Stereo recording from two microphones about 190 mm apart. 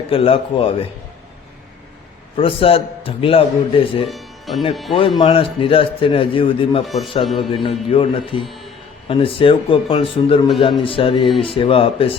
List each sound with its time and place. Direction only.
0.1 s a man's voice: 30° left (ahead or behind)
2.3 s a man's voice: 30° left (ahead or behind)
4.1 s music: centre (ahead or behind)
4.7 s speech: centre (ahead or behind)
4.9 s a man's voice: 25° left (ahead or behind)
6.8 s speech: centre (ahead or behind)
7.3 s a man's voice: 30° left (ahead or behind)